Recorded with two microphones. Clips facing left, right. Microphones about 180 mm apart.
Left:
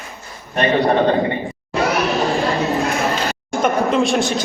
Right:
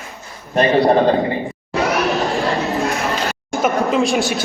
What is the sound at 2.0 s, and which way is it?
Chatter, centre (ahead or behind).